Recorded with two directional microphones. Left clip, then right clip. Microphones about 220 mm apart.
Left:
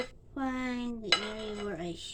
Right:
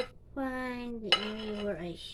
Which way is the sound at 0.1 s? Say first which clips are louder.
Left 1 dB; 30° left (ahead or behind).